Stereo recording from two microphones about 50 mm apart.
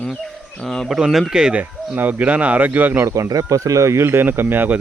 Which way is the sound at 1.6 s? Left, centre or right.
Right.